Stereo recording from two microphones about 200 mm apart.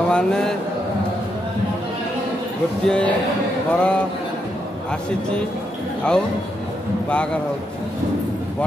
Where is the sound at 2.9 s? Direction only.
5° left (ahead or behind).